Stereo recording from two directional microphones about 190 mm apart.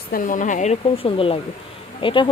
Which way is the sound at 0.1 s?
45° left (ahead or behind).